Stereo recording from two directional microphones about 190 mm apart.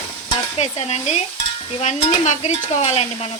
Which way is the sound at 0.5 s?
35° left (ahead or behind).